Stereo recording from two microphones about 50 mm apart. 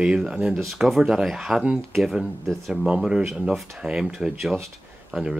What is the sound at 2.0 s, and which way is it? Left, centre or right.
Speech, centre.